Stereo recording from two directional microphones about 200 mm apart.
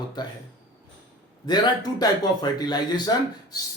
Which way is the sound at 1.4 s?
20° left (ahead or behind).